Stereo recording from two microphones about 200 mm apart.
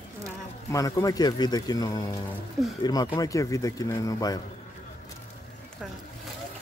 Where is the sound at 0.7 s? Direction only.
15° left (ahead or behind).